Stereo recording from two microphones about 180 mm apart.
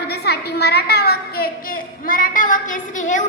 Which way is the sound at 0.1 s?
65° left (ahead or behind).